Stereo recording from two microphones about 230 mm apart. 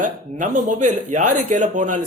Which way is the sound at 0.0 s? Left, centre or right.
Right.